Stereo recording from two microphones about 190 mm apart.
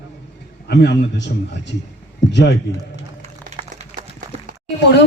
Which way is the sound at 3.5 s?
35° right (ahead or behind).